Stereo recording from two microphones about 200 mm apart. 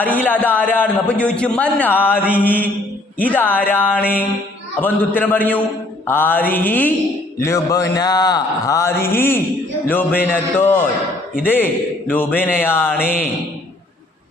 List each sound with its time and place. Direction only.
0.0 s a man's voice: 10° left (ahead or behind)